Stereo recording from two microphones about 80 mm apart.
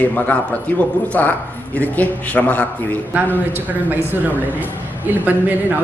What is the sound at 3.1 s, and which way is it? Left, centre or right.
Speech, right.